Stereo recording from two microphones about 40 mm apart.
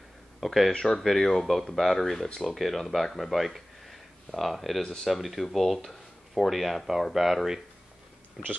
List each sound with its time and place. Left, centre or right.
0.4 s speech: centre
0.7 s speech: centre
1.0 s speech: centre
8.4 s speech: centre